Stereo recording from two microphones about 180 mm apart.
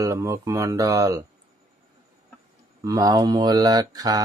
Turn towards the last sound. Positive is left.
turn(degrees=-20)  # may be behind; listen again after turning